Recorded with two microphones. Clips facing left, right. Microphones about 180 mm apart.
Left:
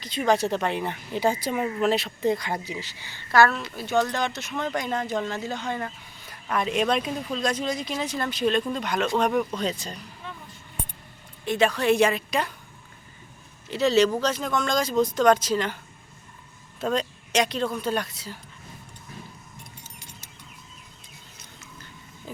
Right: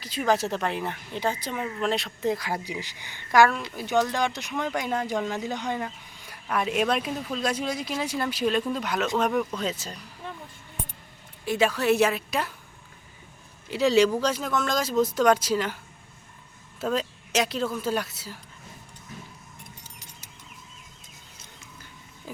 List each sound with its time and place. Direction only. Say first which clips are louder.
0.0 s a woman's voice: left 2 dB; 5° right (ahead or behind)
11.4 s a woman's voice: left 1 dB; 5° right (ahead or behind)
13.7 s speech: even; 10° right (ahead or behind)
16.8 s a woman's voice: left 1 dB; 5° right (ahead or behind)